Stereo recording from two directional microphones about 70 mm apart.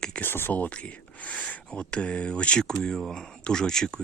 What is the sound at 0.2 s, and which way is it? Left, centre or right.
Speech, left.